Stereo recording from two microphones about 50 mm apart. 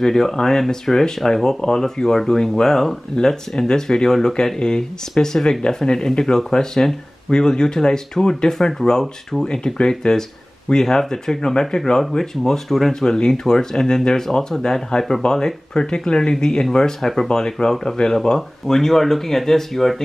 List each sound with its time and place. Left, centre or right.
0.0 s speech: centre